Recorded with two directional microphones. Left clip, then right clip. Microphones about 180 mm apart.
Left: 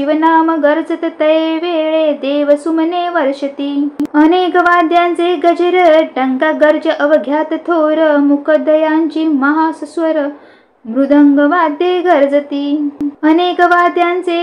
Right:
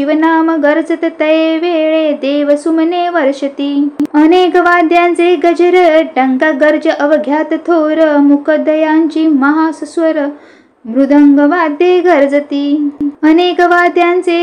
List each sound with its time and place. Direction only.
0.0 s speech: 25° right (ahead or behind)